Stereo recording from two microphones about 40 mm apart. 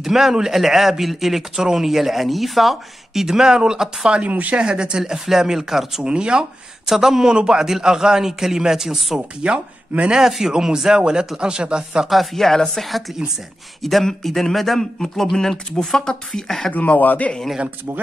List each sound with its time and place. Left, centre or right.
0.0 s speech: centre
3.3 s a man's voice: centre
4.2 s a woman's voice: right
4.6 s a man's voice: right; by 6.0 s centre
6.0 s speech: right
6.9 s a man's voice: centre
9.4 s speech: right
10.1 s a man's voice: centre
12.1 s speech: centre
14.0 s speech: centre
16.7 s speech: left